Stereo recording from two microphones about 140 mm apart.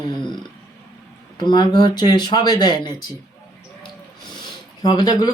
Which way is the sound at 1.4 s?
35° left (ahead or behind).